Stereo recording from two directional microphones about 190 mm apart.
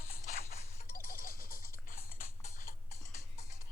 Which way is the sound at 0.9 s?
45° left (ahead or behind).